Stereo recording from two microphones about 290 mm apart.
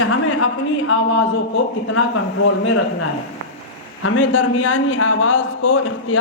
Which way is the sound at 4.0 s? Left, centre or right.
Left.